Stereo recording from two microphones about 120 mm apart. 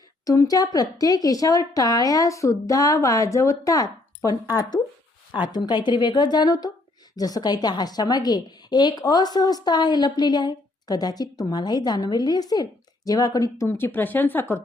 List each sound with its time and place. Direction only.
0.3 s a woman's voice: 30° left (ahead or behind)